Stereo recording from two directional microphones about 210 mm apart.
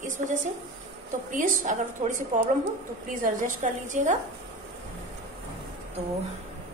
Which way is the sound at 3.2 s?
40° right (ahead or behind).